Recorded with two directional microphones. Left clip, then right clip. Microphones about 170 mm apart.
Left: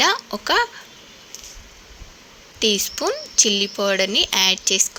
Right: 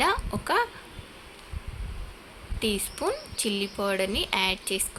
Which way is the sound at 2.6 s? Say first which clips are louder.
Left 8 dB; 30° left (ahead or behind).